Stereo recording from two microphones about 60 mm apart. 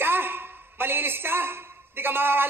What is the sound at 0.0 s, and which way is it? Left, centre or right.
A man's voice, right.